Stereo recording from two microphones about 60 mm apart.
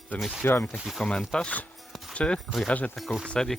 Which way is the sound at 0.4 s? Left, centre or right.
Left.